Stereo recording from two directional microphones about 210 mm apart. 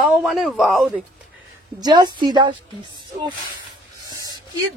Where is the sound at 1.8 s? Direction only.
20° right (ahead or behind).